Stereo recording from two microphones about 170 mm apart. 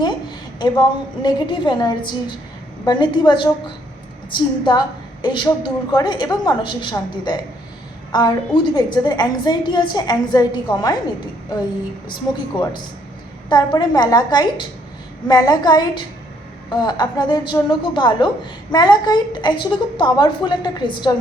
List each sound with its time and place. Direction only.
0.6 s a woman's voice: 25° left (ahead or behind)
12.0 s a woman's voice: 25° left (ahead or behind)